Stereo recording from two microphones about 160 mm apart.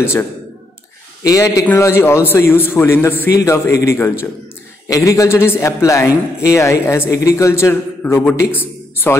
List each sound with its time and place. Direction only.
0.0 s a man's voice: 15° left (ahead or behind)